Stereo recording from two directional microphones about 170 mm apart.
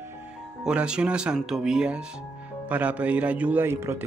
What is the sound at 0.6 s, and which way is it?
Speech, 5° right (ahead or behind).